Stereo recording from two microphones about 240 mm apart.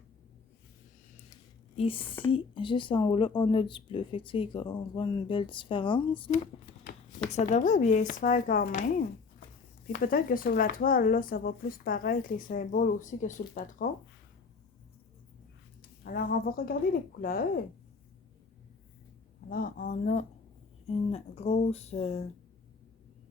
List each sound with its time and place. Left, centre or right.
1.7 s speech: left
9.9 s speech: left
16.0 s speech: left
19.5 s speech: left